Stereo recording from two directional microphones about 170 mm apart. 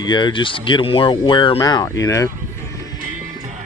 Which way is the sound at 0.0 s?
25° left (ahead or behind).